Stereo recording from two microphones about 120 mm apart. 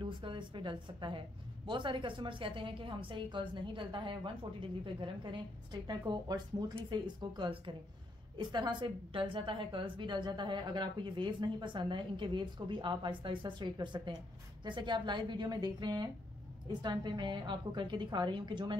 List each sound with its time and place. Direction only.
0.0 s a woman's voice: 45° right (ahead or behind)